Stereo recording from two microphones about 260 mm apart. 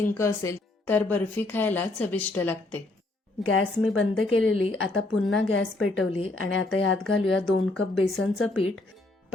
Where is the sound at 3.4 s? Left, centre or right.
Left.